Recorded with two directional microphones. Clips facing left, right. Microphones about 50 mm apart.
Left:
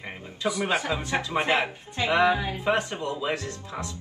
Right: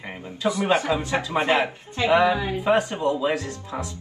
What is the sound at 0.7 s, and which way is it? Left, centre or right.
Speech, right.